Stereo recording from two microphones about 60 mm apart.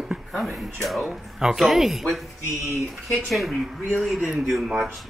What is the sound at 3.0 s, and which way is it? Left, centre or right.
Speech, centre.